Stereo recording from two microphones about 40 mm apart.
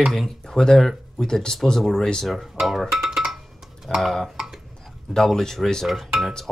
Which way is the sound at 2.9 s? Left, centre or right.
Centre.